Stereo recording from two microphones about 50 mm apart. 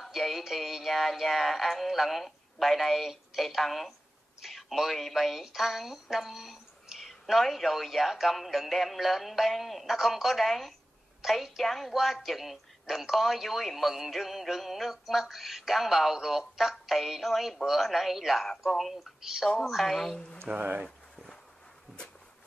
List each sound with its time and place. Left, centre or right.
0.0 s speech: centre
20.4 s speech: right